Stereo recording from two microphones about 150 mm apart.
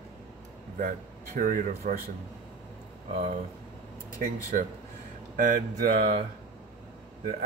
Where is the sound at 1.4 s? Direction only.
70° right (ahead or behind).